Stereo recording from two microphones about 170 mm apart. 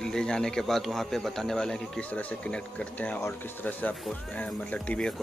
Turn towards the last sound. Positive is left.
turn(degrees=5)  # may be behind; listen again after turning